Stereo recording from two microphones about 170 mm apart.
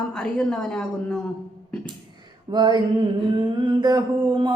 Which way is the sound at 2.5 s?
25° right (ahead or behind).